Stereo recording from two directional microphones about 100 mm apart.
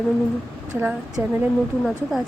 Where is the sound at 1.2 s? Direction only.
20° right (ahead or behind).